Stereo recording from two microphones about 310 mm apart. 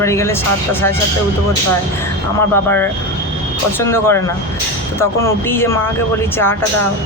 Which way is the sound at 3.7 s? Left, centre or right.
Centre.